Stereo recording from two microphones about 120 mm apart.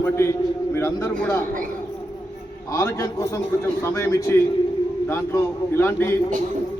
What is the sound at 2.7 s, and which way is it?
A man's voice, 25° left (ahead or behind).